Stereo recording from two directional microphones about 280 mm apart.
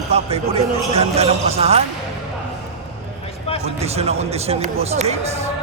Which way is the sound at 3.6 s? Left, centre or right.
Right.